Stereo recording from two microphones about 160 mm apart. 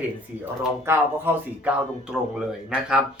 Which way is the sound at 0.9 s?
15° right (ahead or behind).